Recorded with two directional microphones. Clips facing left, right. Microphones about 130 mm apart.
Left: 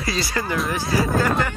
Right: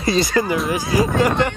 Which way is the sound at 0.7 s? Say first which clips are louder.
Right 3 dB; 15° right (ahead or behind).